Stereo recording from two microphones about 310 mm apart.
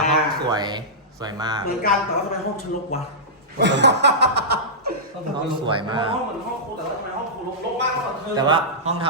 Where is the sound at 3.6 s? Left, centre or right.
Right.